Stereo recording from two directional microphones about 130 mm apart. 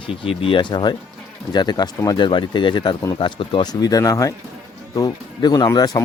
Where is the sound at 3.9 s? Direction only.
25° left (ahead or behind).